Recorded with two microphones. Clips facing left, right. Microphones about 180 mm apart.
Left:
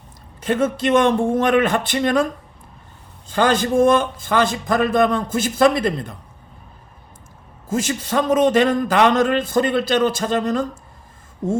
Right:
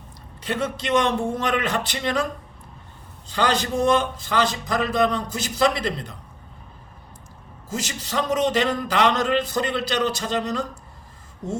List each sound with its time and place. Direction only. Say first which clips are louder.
0.4 s a man's voice: left 7 dB; 50° left (ahead or behind)
3.2 s a man's voice: left 5 dB; 50° left (ahead or behind)
7.7 s a man's voice: left 8 dB; 50° left (ahead or behind)